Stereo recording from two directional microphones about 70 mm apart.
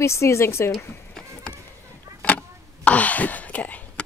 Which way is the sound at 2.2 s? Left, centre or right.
Centre.